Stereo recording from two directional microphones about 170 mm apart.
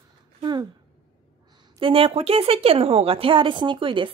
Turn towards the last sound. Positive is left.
turn(degrees=-30)  # may be behind; listen again after turning